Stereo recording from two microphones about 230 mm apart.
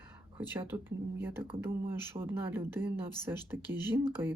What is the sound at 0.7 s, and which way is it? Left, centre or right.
Speech, centre.